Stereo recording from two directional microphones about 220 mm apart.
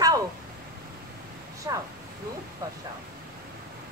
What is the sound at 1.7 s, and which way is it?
Speech, 15° right (ahead or behind).